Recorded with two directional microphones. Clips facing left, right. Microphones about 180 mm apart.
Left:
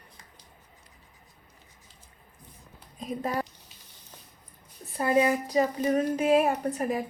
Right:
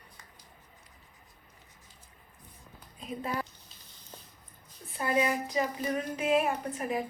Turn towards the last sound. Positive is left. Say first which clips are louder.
# left 5 dB
turn(degrees=40)  # may be behind; listen again after turning